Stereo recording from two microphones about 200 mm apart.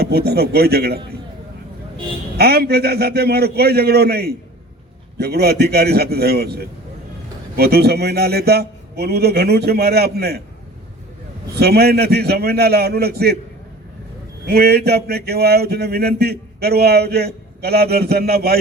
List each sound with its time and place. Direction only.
0.0 s speech: 55° right (ahead or behind)
2.4 s speech: 50° right (ahead or behind)
11.5 s speech: 55° right (ahead or behind)
14.4 s speech: 55° right (ahead or behind)